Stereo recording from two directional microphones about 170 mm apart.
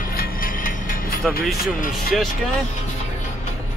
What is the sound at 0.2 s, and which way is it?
Music, 60° left (ahead or behind).